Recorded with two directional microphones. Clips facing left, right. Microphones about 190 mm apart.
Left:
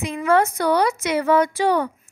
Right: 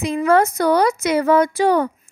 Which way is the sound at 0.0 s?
40° right (ahead or behind).